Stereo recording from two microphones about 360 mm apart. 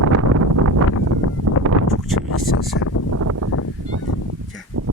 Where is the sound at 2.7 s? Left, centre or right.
Left.